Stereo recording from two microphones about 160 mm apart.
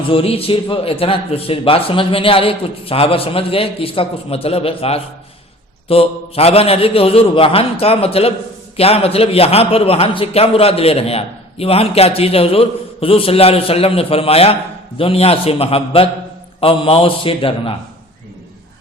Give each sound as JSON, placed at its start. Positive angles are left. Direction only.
{"t": 0.1, "sound": "a man's voice", "side_deg": 35}